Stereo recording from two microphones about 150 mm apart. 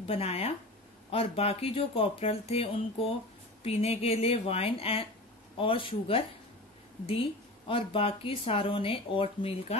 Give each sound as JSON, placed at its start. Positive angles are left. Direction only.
{"t": 0.0, "sound": "speech", "side_deg": 40}